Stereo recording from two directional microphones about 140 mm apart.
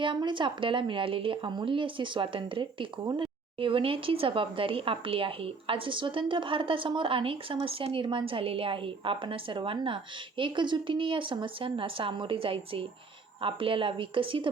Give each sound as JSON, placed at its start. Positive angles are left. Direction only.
{"t": 0.0, "sound": "speech", "side_deg": -35}